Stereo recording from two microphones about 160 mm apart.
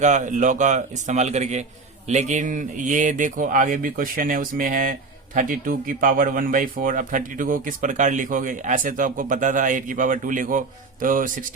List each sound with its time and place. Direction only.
0.0 s speech: 50° right (ahead or behind)